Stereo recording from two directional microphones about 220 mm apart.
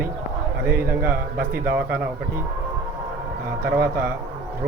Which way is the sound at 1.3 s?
45° right (ahead or behind).